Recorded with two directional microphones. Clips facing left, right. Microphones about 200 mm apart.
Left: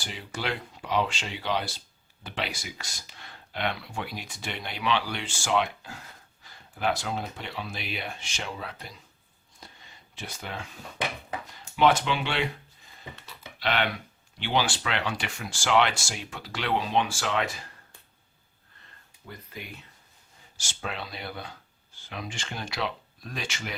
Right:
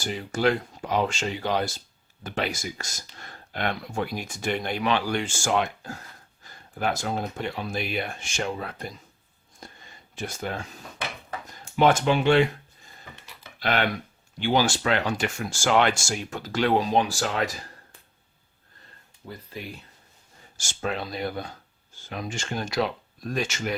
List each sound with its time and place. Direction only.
0.0 s speech: 45° right (ahead or behind)
9.6 s a sound: 50° right (ahead or behind)
11.4 s speech: 45° right (ahead or behind)
13.6 s speech: 45° right (ahead or behind)
20.6 s speech: 45° right (ahead or behind)